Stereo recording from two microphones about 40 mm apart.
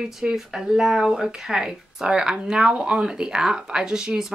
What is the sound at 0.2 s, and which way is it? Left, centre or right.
Speech, centre.